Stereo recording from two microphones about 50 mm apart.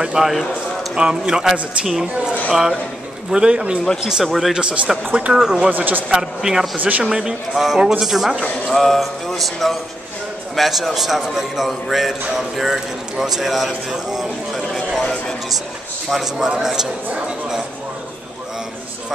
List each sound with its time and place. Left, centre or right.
0.0 s a man's voice: centre
4.1 s a man's voice: centre
4.6 s a man's voice: right
5.7 s a man's voice: right
6.4 s speech: centre
6.8 s a man's voice: right
7.1 s a man's voice: centre
15.0 s speech: centre
16.1 s speech: centre